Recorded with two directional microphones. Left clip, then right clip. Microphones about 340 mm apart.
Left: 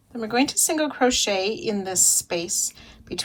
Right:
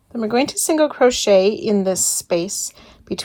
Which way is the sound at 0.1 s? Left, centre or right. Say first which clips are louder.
Right 4 dB; centre.